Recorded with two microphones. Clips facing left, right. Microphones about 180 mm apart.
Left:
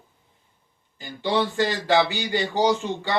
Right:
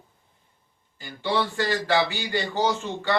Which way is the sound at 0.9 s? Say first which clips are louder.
Left 2 dB; 20° left (ahead or behind).